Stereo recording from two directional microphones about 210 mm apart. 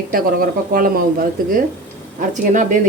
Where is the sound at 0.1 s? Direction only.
45° right (ahead or behind).